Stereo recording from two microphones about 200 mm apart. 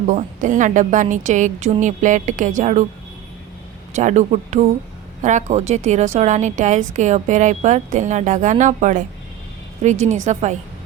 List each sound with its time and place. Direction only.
0.1 s a woman's voice: 40° right (ahead or behind)
3.9 s a woman's voice: 35° right (ahead or behind)
10.1 s a woman's voice: 35° right (ahead or behind)